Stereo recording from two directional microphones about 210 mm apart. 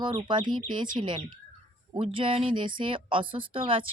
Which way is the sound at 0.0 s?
20° right (ahead or behind).